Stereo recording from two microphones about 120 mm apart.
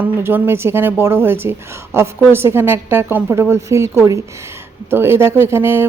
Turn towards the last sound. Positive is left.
turn(degrees=-20)  # may be behind; listen again after turning